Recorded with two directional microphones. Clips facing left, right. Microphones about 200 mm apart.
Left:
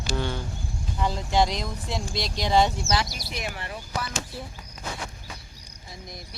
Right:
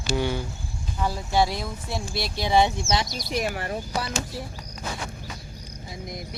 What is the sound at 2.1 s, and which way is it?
Speech, 20° left (ahead or behind).